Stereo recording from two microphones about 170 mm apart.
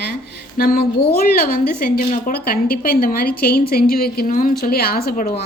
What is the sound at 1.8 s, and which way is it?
A woman's voice, 60° left (ahead or behind).